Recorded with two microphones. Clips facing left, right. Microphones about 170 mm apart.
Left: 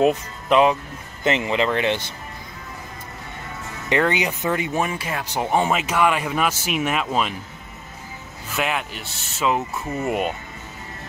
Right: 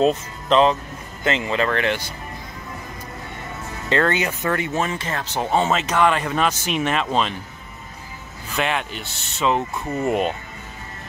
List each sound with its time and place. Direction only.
0.0 s speech: 15° left (ahead or behind)
3.9 s speech: 15° left (ahead or behind)
8.5 s speech: 5° left (ahead or behind)